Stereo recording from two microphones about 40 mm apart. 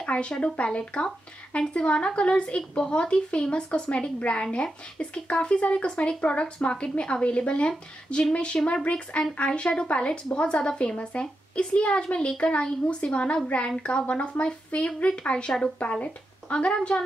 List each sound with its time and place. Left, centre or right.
0.0 s speech: left